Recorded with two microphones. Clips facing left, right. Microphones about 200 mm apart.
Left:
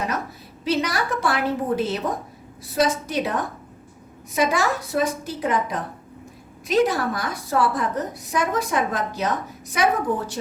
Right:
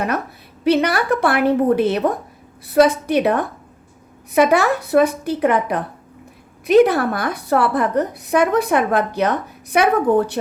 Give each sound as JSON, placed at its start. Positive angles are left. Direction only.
{"t": 0.6, "sound": "a woman's voice", "side_deg": -60}